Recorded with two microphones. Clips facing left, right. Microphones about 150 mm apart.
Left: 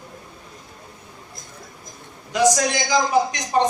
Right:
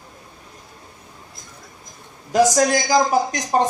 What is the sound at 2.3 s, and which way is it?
A man's voice, 45° right (ahead or behind).